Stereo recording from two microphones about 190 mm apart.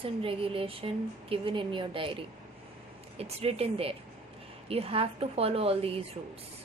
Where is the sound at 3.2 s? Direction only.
30° right (ahead or behind).